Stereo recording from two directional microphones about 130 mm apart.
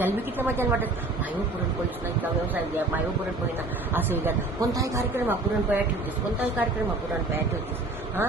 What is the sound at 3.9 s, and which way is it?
Speech, 15° right (ahead or behind).